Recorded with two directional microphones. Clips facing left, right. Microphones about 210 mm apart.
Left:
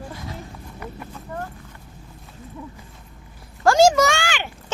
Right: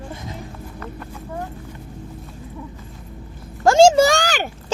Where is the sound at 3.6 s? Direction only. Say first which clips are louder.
Right 3 dB; 25° right (ahead or behind); by 4.4 s 40° right (ahead or behind).